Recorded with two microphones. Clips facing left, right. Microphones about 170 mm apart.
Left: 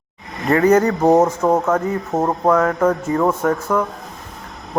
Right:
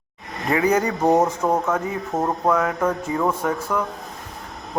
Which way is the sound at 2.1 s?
30° left (ahead or behind).